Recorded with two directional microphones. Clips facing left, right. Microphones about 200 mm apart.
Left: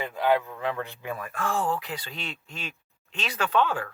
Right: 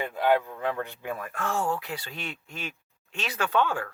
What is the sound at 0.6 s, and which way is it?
Speech, 50° right (ahead or behind).